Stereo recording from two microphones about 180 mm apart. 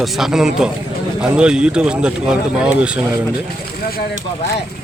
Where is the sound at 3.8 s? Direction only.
55° left (ahead or behind).